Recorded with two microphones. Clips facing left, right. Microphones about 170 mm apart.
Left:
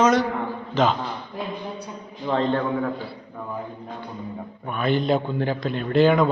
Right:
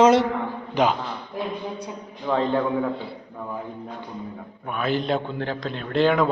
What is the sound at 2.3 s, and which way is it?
Speech, 10° right (ahead or behind).